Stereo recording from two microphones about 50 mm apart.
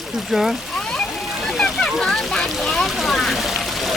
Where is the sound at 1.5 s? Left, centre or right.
Centre.